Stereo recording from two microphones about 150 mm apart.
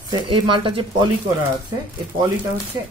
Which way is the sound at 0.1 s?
30° right (ahead or behind).